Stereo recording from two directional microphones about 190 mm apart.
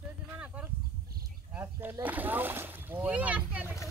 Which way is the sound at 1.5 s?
10° right (ahead or behind).